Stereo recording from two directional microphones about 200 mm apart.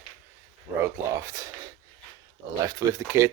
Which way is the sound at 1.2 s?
15° right (ahead or behind).